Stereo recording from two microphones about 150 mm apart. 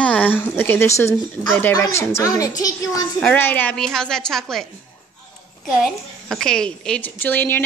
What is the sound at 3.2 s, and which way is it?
A woman's voice, 10° left (ahead or behind).